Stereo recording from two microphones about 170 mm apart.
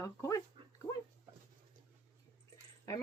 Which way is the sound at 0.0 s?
20° left (ahead or behind).